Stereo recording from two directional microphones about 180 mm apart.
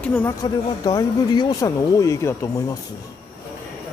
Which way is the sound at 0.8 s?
20° left (ahead or behind).